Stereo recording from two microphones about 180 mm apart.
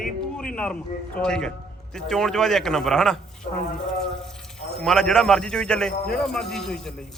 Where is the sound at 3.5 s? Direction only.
45° left (ahead or behind).